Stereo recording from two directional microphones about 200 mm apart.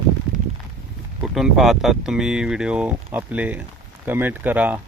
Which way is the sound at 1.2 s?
Centre (ahead or behind).